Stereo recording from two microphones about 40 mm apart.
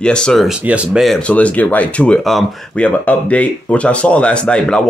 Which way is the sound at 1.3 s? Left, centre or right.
Left.